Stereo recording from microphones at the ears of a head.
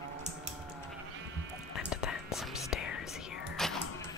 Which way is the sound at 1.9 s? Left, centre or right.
Left.